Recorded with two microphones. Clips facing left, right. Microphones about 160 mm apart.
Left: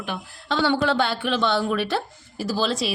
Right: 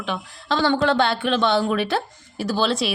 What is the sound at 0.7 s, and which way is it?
Speech, 10° left (ahead or behind).